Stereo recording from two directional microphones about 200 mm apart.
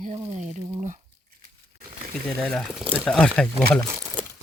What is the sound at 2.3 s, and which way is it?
Speech, centre (ahead or behind).